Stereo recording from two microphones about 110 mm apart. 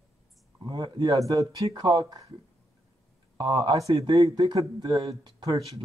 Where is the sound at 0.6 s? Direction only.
45° right (ahead or behind).